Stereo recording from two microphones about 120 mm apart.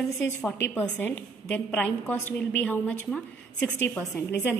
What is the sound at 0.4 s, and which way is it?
A woman's voice, 10° left (ahead or behind).